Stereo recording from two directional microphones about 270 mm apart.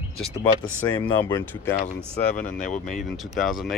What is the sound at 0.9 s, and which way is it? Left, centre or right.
Speech, centre.